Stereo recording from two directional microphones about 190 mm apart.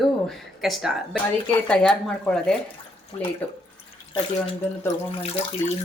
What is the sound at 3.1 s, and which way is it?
Speech, 30° left (ahead or behind).